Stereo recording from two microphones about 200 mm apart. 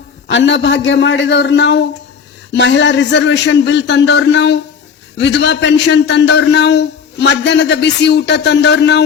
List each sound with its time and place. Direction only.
0.3 s a man's voice: 65° left (ahead or behind)